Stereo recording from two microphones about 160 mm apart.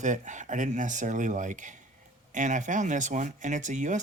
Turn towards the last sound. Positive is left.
turn(degrees=-50)  # may be behind; listen again after turning